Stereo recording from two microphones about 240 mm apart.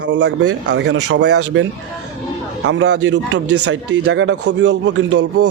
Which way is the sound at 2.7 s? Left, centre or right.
Right.